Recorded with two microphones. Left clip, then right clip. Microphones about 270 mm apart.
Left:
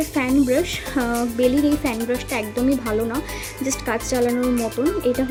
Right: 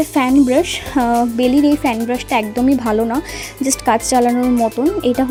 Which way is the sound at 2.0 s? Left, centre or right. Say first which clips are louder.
Right 6 dB; right.